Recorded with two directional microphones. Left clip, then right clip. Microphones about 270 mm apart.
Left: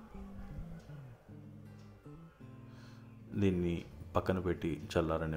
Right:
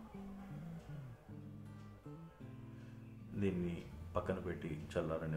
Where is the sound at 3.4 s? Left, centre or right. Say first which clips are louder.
Left 7 dB; left.